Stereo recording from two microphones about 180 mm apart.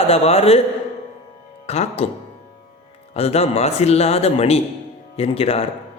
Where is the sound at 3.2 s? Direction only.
35° left (ahead or behind).